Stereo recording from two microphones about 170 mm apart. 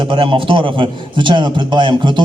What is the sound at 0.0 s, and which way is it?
A man's voice, 30° right (ahead or behind).